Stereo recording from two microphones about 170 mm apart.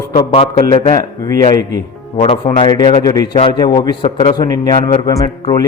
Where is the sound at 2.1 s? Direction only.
35° left (ahead or behind).